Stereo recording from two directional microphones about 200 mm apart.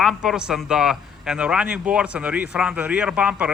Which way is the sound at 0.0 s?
Centre (ahead or behind).